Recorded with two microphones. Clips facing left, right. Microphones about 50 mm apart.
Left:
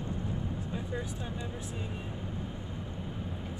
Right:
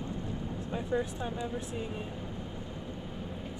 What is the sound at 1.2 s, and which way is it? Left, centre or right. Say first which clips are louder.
Speech: right 4 dB; centre.